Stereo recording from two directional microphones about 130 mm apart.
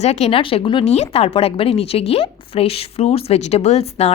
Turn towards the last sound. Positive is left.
turn(degrees=55)  # may be behind; listen again after turning